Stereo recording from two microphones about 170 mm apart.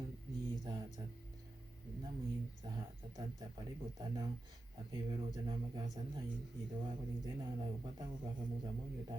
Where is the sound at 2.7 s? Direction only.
25° right (ahead or behind).